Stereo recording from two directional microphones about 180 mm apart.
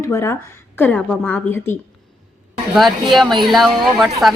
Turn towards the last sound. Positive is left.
turn(degrees=0)  # may be behind; listen again after turning